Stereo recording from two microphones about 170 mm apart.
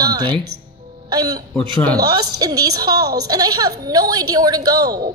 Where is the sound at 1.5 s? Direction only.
10° left (ahead or behind).